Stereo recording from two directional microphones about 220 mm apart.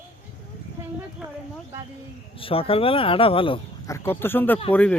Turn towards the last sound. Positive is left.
turn(degrees=5)  # may be behind; listen again after turning